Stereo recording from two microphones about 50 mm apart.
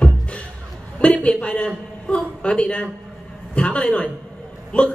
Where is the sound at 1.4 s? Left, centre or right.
Left.